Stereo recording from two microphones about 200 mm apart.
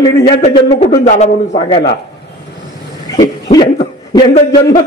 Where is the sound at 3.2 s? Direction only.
20° left (ahead or behind).